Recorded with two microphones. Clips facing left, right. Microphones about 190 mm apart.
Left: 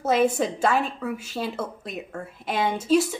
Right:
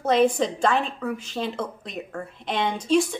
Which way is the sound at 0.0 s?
5° left (ahead or behind).